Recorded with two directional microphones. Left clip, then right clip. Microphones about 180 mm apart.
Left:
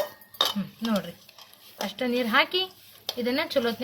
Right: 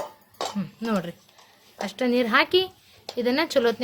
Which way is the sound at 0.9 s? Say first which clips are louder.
Right 2 dB; 70° right (ahead or behind).